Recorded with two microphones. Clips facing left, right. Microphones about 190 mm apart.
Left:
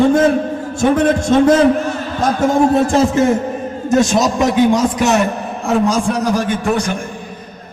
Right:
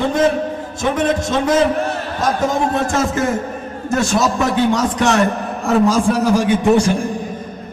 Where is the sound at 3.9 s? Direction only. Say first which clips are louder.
Left 3 dB; 20° left (ahead or behind).